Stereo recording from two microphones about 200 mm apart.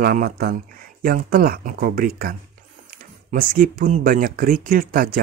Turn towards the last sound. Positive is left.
turn(degrees=-45)  # may be behind; listen again after turning